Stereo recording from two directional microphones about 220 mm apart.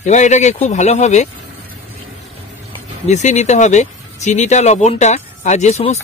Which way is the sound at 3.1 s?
30° left (ahead or behind).